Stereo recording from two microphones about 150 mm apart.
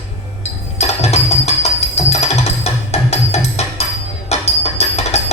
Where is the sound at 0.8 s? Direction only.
45° left (ahead or behind).